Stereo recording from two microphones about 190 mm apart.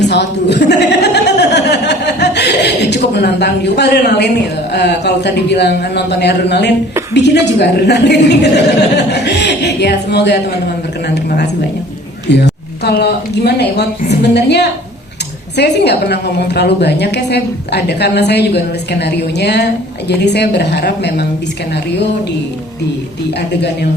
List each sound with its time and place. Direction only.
0.0 s chuckle: 65° left (ahead or behind)
4.7 s a woman's voice: 60° left (ahead or behind)